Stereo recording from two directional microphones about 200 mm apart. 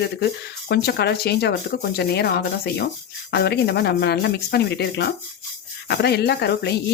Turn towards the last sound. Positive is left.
turn(degrees=55)  # may be behind; listen again after turning